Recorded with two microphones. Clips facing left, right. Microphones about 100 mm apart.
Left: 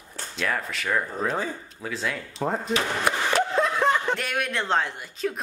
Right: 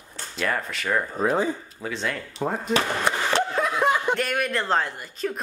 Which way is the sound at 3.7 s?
10° right (ahead or behind).